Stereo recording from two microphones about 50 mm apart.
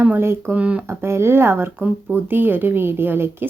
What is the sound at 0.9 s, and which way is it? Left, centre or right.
A woman's voice, right.